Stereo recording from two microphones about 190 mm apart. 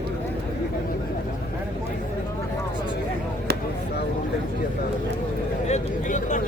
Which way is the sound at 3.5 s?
60° right (ahead or behind).